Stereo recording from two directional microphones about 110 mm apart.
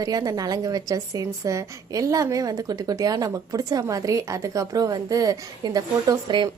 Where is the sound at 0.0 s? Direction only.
35° right (ahead or behind).